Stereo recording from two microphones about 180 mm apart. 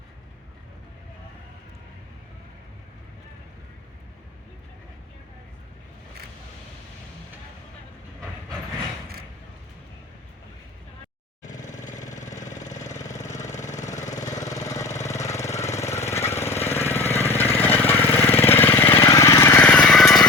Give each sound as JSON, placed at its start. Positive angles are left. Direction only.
{"t": 11.5, "sound": "engine", "side_deg": 45}
{"t": 14.4, "sound": "engine", "side_deg": 20}
{"t": 15.0, "sound": "jackhammer", "side_deg": 15}